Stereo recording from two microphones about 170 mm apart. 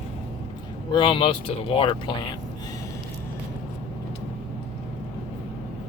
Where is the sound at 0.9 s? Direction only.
30° left (ahead or behind).